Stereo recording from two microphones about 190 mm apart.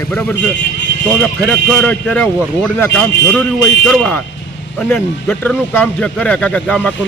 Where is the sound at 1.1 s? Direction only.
Centre (ahead or behind).